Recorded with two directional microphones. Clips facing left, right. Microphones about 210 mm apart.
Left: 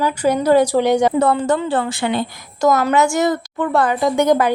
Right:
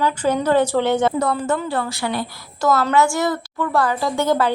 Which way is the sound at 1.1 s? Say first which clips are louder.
Left 4 dB; 30° left (ahead or behind).